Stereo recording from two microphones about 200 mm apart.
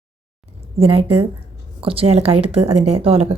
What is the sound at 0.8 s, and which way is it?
Speech, 30° right (ahead or behind).